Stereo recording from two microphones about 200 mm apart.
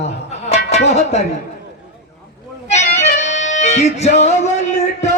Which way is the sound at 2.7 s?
35° left (ahead or behind).